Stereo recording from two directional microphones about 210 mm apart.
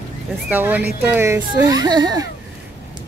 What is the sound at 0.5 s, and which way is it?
Speech, 10° right (ahead or behind).